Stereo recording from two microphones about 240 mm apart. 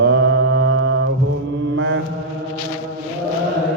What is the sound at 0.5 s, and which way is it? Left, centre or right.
Mantra, right.